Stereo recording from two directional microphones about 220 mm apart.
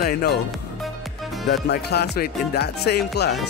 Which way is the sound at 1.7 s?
45° left (ahead or behind).